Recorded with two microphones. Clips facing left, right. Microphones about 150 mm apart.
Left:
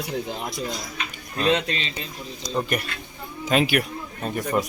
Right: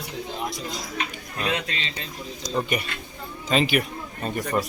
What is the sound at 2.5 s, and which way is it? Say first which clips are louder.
Speech: even; centre (ahead or behind).